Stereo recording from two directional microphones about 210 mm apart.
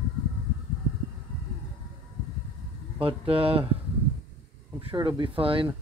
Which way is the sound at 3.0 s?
25° right (ahead or behind).